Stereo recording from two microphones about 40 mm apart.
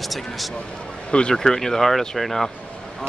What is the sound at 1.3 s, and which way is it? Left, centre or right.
Speech, centre.